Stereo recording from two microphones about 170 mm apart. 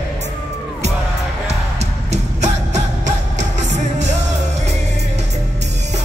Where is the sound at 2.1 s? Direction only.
45° right (ahead or behind).